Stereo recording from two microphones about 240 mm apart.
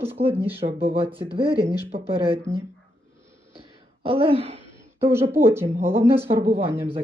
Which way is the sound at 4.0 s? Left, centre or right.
Right.